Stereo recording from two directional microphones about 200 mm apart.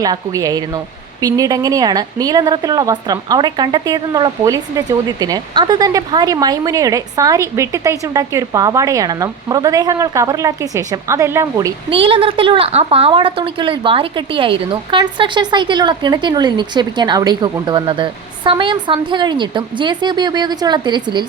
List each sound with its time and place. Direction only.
0.0 s a woman's voice: 15° right (ahead or behind)